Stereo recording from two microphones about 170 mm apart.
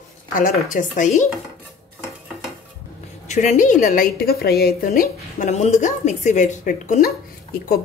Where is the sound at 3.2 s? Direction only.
45° left (ahead or behind).